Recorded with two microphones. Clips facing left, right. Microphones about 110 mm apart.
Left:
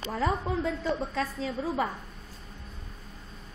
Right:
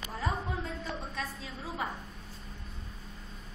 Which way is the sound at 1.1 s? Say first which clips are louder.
Left 9 dB; 65° left (ahead or behind).